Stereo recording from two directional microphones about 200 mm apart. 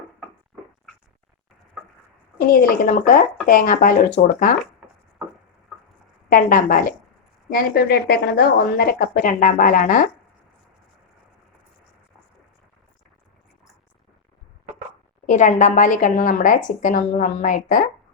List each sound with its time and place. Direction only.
2.5 s a woman's voice: 45° left (ahead or behind)
6.3 s a woman's voice: 45° left (ahead or behind)
15.3 s speech: 40° left (ahead or behind)